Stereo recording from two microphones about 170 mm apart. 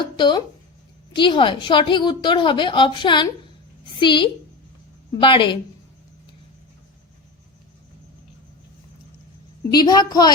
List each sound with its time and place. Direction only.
0.0 s a woman's voice: 25° left (ahead or behind)
9.7 s a woman's voice: 25° left (ahead or behind)